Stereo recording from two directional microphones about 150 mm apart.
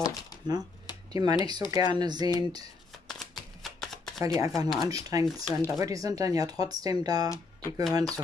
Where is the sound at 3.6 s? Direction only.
Centre (ahead or behind).